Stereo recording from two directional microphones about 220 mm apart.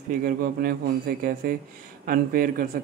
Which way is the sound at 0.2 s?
40° right (ahead or behind).